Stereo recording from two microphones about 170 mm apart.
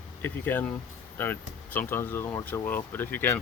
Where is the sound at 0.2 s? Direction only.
10° left (ahead or behind).